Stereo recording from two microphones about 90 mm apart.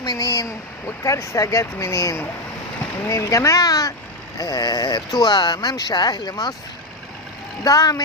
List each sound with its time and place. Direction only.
0.0 s speech: 45° left (ahead or behind)
7.6 s speech: 40° left (ahead or behind)